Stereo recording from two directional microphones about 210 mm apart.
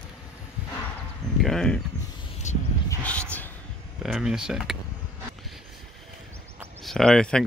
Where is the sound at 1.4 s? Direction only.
Centre (ahead or behind).